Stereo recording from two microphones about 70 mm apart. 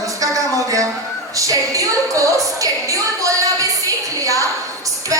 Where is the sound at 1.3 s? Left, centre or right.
Right.